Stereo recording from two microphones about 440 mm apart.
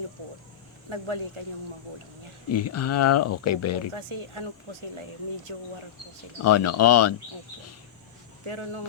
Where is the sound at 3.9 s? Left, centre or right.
Right.